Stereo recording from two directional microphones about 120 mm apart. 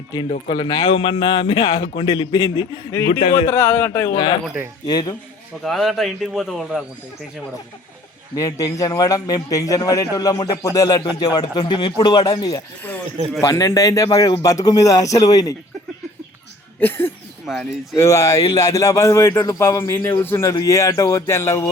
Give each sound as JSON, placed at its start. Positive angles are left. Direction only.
{"t": 0.3, "sound": "a man's voice", "side_deg": 45}
{"t": 3.1, "sound": "speech", "side_deg": 55}
{"t": 3.5, "sound": "speech", "side_deg": 15}
{"t": 4.1, "sound": "a man's voice", "side_deg": 35}
{"t": 5.6, "sound": "a man's voice", "side_deg": 0}
{"t": 8.4, "sound": "a man's voice", "side_deg": 30}
{"t": 12.8, "sound": "a sound", "side_deg": 15}
{"t": 13.4, "sound": "a man's voice", "side_deg": 30}
{"t": 16.8, "sound": "speech", "side_deg": 20}
{"t": 17.4, "sound": "speech", "side_deg": 0}
{"t": 17.9, "sound": "a man's voice", "side_deg": 25}